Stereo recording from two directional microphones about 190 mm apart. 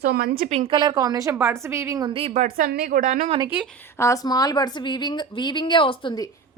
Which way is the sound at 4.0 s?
20° left (ahead or behind).